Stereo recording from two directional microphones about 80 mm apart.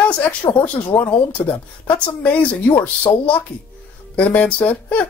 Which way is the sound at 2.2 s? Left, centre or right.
Centre.